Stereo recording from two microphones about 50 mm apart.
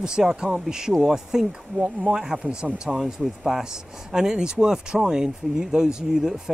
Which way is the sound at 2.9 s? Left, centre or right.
Centre.